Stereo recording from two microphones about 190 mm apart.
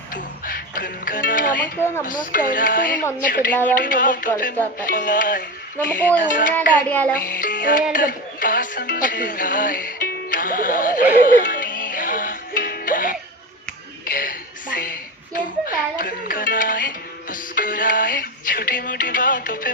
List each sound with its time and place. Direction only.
0.1 s music: 45° left (ahead or behind)
2.0 s speech: 45° left (ahead or behind)
3.5 s a man's voice: 10° left (ahead or behind)
3.8 s speech: 45° left (ahead or behind)
4.9 s music: 45° left (ahead or behind)
6.2 s speech: 45° left (ahead or behind)
6.9 s a man's voice: 10° left (ahead or behind)
7.2 s speech: 45° left (ahead or behind)
7.9 s music: 45° left (ahead or behind)
14.0 s a sound: 50° left (ahead or behind)